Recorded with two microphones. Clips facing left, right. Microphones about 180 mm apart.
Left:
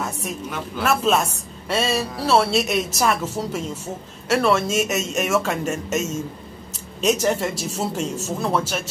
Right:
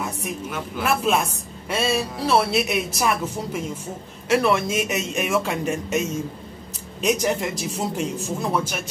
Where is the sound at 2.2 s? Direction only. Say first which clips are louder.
Left 2 dB; 10° right (ahead or behind).